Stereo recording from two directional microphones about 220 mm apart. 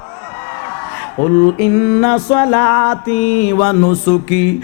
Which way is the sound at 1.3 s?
15° left (ahead or behind).